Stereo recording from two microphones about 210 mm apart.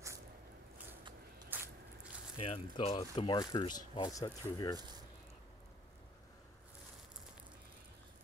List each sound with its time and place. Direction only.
1.5 s biting: 10° right (ahead or behind)
2.3 s speech: 25° left (ahead or behind)
4.7 s speech: 20° right (ahead or behind)